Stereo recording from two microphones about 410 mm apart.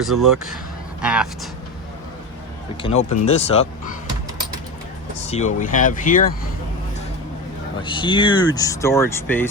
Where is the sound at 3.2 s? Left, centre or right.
Centre.